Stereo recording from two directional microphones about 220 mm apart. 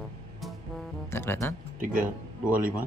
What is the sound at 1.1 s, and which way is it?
Music, 10° left (ahead or behind).